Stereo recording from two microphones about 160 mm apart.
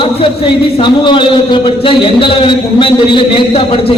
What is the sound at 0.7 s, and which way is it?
A man's voice, 30° left (ahead or behind).